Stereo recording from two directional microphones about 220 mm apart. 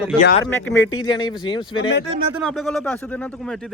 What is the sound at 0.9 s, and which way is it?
Speech, 15° left (ahead or behind).